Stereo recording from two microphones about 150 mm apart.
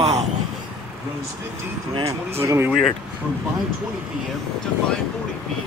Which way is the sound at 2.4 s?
20° right (ahead or behind).